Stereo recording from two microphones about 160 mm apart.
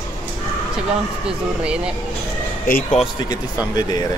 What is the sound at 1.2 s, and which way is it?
Speech, 5° right (ahead or behind).